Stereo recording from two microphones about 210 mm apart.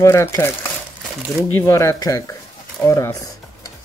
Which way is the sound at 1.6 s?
15° left (ahead or behind).